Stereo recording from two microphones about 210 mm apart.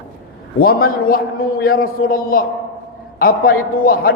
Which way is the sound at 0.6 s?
45° left (ahead or behind).